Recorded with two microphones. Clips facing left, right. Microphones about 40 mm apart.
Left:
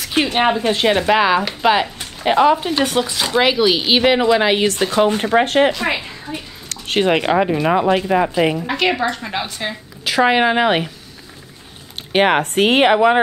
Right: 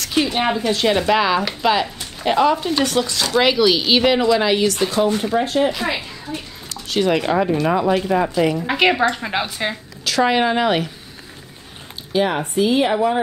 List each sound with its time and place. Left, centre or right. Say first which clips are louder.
0.1 s speech: left 3 dB; left
4.9 s speech: left 3 dB; left
5.9 s a woman's voice: left 1 dB; centre
6.9 s speech: left 2 dB; left
8.6 s a woman's voice: right 2 dB; centre
10.0 s speech: left 2 dB; centre
12.1 s speech: left 5 dB; left